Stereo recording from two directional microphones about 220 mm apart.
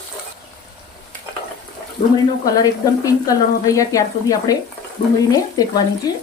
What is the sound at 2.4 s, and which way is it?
Speech, 15° left (ahead or behind).